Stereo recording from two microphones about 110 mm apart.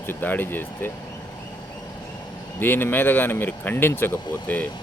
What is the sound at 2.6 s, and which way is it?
Speech, 20° left (ahead or behind).